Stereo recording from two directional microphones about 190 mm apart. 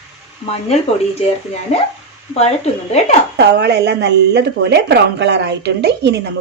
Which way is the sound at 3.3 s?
60° right (ahead or behind).